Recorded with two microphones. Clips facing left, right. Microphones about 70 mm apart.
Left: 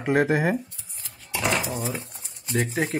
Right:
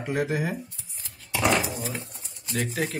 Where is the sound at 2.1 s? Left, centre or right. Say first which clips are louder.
Left 4 dB; left.